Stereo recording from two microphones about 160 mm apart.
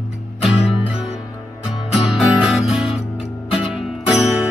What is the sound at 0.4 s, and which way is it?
Music, 5° right (ahead or behind).